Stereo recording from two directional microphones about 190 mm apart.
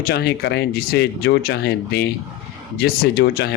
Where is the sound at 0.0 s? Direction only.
60° left (ahead or behind).